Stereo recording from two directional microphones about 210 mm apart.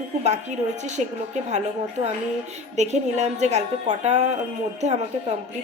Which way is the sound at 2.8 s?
35° right (ahead or behind).